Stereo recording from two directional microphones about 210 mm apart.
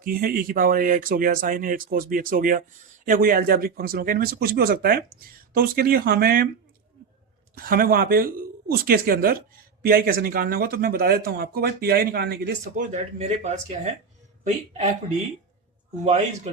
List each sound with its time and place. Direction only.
0.0 s speech: 45° right (ahead or behind)
7.5 s speech: 45° right (ahead or behind)
12.9 s speech: 30° right (ahead or behind)
16.0 s speech: 35° right (ahead or behind)